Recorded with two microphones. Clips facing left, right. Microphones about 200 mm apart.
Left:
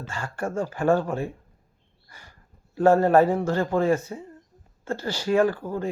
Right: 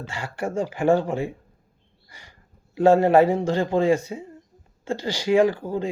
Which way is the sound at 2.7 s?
10° right (ahead or behind).